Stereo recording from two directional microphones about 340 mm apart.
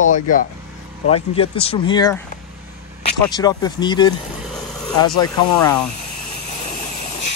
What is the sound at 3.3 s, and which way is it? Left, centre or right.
Speech, centre.